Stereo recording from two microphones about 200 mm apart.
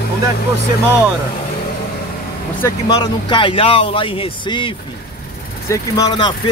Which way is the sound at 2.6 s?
20° left (ahead or behind).